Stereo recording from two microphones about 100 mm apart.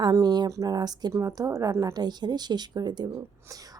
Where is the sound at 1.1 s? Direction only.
30° right (ahead or behind).